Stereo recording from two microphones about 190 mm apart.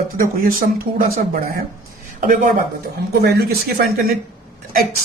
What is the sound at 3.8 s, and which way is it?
Speech, 55° right (ahead or behind).